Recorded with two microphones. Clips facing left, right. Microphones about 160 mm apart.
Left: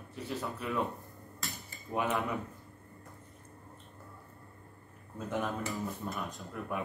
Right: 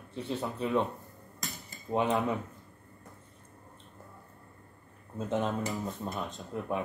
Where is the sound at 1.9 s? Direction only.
25° right (ahead or behind).